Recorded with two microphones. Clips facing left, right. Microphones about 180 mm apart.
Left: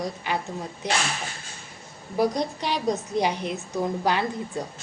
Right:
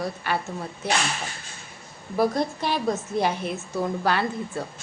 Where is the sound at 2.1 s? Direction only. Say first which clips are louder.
Right 1 dB; 15° left (ahead or behind).